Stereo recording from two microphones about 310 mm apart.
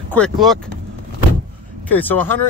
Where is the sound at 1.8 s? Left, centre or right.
Centre.